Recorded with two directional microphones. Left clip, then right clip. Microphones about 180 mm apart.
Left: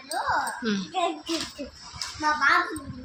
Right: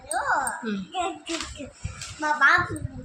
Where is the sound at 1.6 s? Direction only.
30° left (ahead or behind).